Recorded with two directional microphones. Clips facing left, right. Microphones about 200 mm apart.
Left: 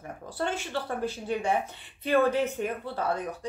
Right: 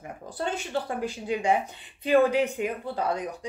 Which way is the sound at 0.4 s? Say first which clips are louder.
Right 1 dB; 15° right (ahead or behind).